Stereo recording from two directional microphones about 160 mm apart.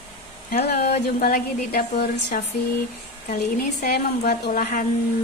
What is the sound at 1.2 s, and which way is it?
A woman's voice, 65° left (ahead or behind).